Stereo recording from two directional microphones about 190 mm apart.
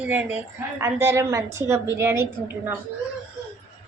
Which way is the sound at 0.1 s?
10° right (ahead or behind).